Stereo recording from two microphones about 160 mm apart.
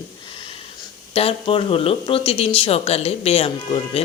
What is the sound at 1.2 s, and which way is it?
Speech, 35° left (ahead or behind).